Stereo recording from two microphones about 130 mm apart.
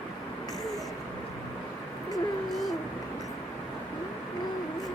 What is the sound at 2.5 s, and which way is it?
Vehicle, centre (ahead or behind).